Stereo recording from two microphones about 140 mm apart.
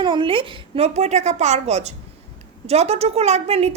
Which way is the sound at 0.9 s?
55° right (ahead or behind).